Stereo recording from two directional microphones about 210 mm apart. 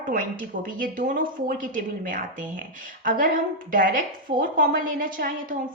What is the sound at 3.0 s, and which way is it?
A woman's voice, 40° right (ahead or behind).